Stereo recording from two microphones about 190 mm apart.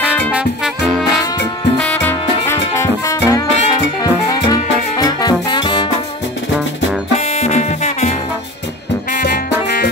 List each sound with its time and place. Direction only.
0.0 s music: 5° right (ahead or behind)
1.8 s music: 10° left (ahead or behind)
7.3 s music: 35° left (ahead or behind)
9.2 s music: 55° left (ahead or behind)